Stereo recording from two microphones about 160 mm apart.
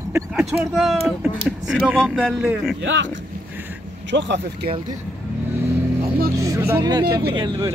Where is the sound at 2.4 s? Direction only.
10° right (ahead or behind).